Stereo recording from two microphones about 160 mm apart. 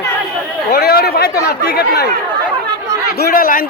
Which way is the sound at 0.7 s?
80° left.